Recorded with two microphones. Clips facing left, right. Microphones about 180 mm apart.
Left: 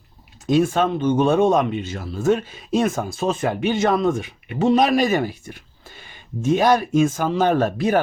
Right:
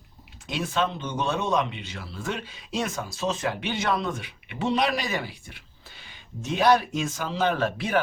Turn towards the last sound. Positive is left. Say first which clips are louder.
# left 7 dB
turn(degrees=40)  # may be behind; listen again after turning